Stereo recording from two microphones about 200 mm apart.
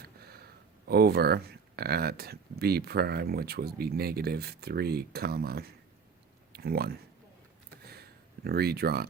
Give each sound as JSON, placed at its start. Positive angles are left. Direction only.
{"t": 0.0, "sound": "speech", "side_deg": -50}
{"t": 8.4, "sound": "speech", "side_deg": -50}